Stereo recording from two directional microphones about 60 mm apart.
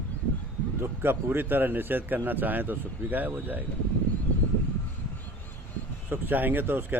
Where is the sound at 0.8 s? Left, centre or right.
Right.